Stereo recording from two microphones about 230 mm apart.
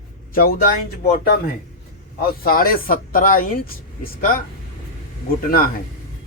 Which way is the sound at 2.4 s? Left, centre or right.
Left.